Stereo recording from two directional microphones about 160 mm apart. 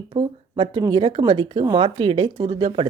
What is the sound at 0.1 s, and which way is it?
Speech, 35° right (ahead or behind).